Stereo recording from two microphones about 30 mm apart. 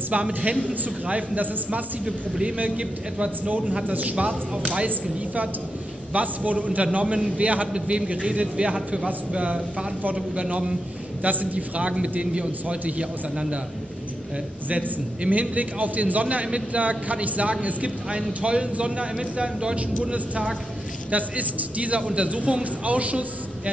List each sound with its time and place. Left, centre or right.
0.4 s a man's voice: right
1.4 s a man's voice: right
2.8 s a man's voice: right
4.0 s a man's voice: right
6.1 s a man's voice: right
6.8 s a man's voice: right
7.7 s a man's voice: right
8.1 s a man's voice: right
11.2 s a man's voice: right
13.0 s a man's voice: right
14.7 s a man's voice: right
21.1 s a man's voice: right